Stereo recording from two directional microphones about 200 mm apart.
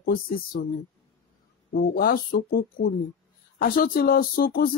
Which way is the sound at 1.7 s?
45° left (ahead or behind).